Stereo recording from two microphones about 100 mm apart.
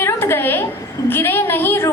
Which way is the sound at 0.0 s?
25° left (ahead or behind).